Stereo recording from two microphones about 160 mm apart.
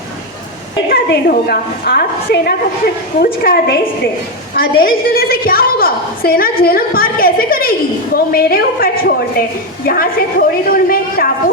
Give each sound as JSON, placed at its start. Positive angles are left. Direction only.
{"t": 0.9, "sound": "a woman's voice", "side_deg": 75}